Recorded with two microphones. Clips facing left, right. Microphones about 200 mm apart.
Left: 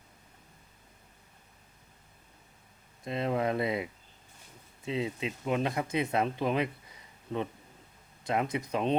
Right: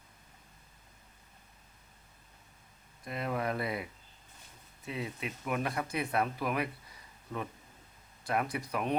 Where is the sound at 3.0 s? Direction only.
25° left (ahead or behind).